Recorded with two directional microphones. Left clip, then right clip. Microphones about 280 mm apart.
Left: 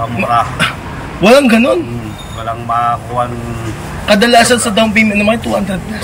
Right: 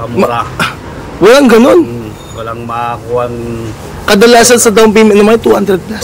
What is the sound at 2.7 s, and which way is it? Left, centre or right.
Speech, centre.